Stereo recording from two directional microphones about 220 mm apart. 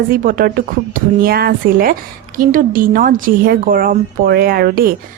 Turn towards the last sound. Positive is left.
turn(degrees=-45)  # may be behind; listen again after turning